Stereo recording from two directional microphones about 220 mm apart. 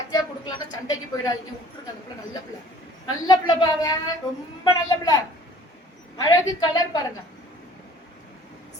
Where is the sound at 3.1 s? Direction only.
15° left (ahead or behind).